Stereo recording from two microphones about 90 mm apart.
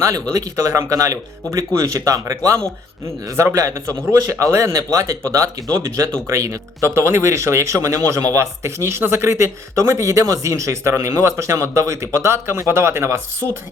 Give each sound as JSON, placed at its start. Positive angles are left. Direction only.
{"t": 0.0, "sound": "speech", "side_deg": -35}